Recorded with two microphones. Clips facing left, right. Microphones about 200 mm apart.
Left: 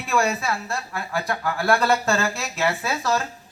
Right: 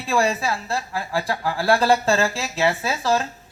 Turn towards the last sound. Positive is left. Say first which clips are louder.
# right 2 dB
turn(degrees=-30)  # may be behind; listen again after turning